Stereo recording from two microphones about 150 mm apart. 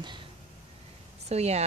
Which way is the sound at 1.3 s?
45° right (ahead or behind).